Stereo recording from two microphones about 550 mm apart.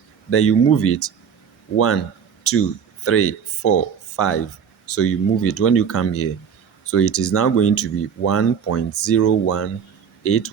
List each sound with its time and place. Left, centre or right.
0.3 s speech: left